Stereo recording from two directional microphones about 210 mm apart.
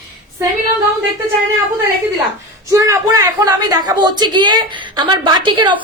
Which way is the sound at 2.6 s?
15° right (ahead or behind).